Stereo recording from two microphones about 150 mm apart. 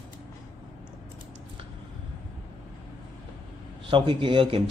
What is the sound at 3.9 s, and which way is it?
Speech, 30° right (ahead or behind).